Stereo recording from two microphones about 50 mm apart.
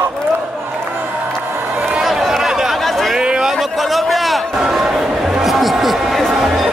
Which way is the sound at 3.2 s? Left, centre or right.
Centre.